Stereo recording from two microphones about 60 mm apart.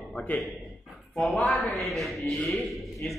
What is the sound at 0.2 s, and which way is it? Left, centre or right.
Speech, left.